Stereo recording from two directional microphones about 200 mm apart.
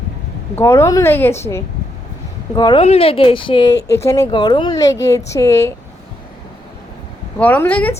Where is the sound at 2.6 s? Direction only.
25° left (ahead or behind).